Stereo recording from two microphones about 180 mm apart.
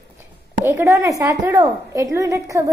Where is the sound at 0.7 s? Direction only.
15° right (ahead or behind).